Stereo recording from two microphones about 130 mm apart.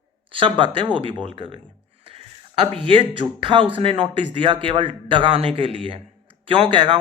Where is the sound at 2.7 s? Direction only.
40° right (ahead or behind).